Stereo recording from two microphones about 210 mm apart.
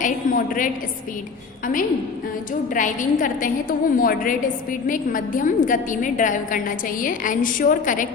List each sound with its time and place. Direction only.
0.0 s a woman's voice: 40° left (ahead or behind)
2.5 s a woman's voice: 40° left (ahead or behind)